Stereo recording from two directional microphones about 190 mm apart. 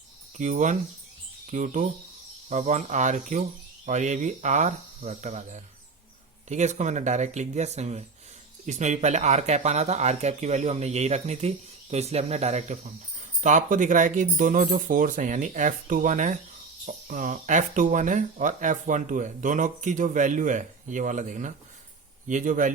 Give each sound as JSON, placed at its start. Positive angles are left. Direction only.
{"t": 0.3, "sound": "speech", "side_deg": -40}